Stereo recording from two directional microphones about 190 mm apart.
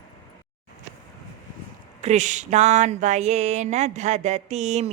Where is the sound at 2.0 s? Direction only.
40° right (ahead or behind).